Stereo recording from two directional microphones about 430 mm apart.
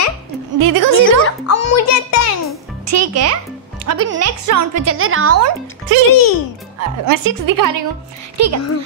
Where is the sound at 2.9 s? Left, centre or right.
Right.